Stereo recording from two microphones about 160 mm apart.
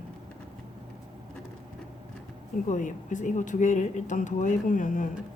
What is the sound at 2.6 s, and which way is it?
Speech, 50° left (ahead or behind).